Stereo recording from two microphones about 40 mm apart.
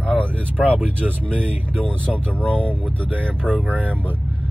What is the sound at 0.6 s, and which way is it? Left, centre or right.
Speech, centre.